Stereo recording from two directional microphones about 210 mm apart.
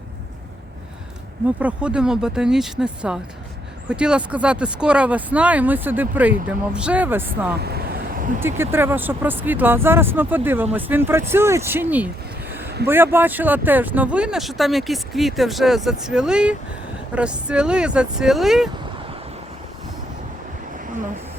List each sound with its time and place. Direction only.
1.5 s speech: 5° right (ahead or behind)
7.6 s waves: 50° right (ahead or behind)
8.4 s speech: 10° right (ahead or behind)